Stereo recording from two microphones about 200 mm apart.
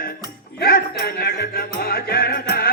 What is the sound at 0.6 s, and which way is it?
Music, 50° left (ahead or behind).